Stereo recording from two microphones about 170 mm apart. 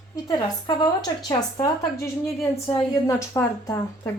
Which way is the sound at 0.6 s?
25° left (ahead or behind).